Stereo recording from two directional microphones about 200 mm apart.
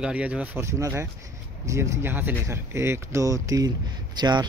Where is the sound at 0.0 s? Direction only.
5° right (ahead or behind).